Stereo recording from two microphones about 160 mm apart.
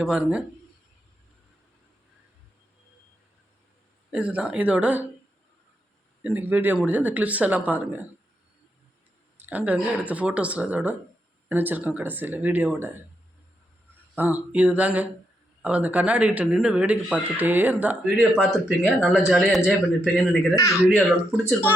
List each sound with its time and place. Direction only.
0.0 s a man's voice: 5° right (ahead or behind)
4.1 s speech: 10° right (ahead or behind)
6.2 s speech: 10° right (ahead or behind)
9.4 s speech: 10° right (ahead or behind)
14.2 s speech: 10° right (ahead or behind)
18.8 s speech: 15° left (ahead or behind)
19.1 s a man's voice: 5° right (ahead or behind)
20.6 s speech: 20° left (ahead or behind)